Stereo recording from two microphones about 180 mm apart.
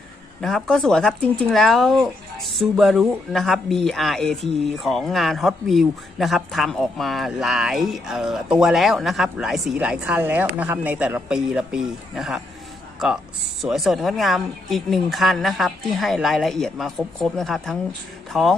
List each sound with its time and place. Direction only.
0.4 s speech: 5° left (ahead or behind)